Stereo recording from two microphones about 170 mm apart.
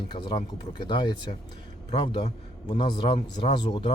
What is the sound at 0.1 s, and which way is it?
Speech, 30° left (ahead or behind).